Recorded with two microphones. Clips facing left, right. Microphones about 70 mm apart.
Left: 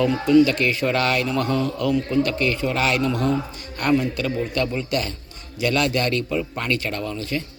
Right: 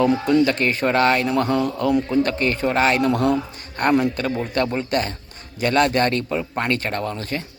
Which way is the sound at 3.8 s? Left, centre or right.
Right.